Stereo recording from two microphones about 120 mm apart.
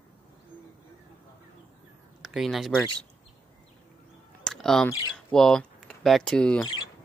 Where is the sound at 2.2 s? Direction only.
Centre (ahead or behind).